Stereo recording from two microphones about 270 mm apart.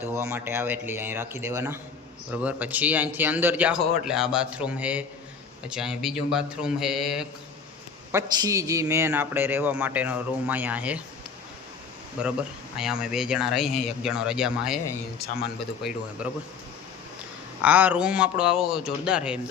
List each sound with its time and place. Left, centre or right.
0.0 s a man's voice: centre
8.1 s a man's voice: centre
12.2 s speech: centre
16.2 s speech: centre
17.6 s speech: centre